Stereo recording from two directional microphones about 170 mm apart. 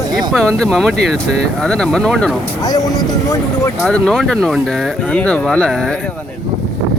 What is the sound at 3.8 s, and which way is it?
Speech, 5° left (ahead or behind).